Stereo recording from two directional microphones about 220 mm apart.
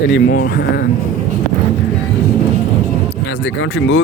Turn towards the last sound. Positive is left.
turn(degrees=55)  # may be behind; listen again after turning